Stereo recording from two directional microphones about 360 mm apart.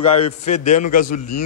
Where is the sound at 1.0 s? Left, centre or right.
Left.